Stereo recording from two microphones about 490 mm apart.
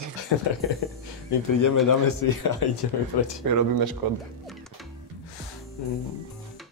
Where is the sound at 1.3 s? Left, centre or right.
Left.